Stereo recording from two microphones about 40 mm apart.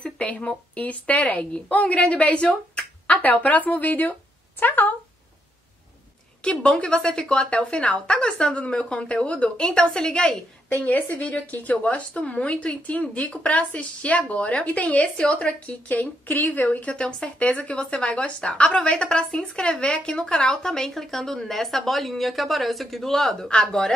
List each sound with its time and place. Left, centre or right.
0.0 s a woman's voice: left
4.6 s speech: left
6.4 s a woman's voice: left
10.9 s a woman's voice: left
16.9 s speech: left; by 23.5 s centre